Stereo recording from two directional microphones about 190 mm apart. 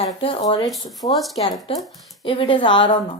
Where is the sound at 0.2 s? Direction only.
25° left (ahead or behind).